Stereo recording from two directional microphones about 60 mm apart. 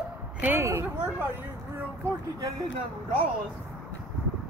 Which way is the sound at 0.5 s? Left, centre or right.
Right.